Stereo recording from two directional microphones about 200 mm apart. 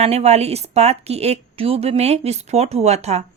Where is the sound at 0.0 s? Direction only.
35° right (ahead or behind).